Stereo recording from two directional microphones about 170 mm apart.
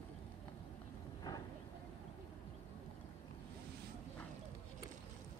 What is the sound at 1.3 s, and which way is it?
Vehicle, 20° left (ahead or behind).